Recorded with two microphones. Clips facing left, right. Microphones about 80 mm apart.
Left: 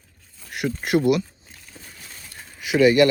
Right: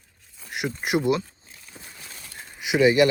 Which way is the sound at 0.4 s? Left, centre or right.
Right.